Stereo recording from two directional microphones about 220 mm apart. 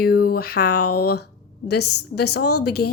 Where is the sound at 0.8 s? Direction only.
90° left.